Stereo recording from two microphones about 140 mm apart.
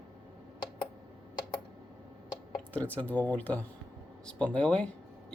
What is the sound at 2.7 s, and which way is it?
Speech, 10° left (ahead or behind).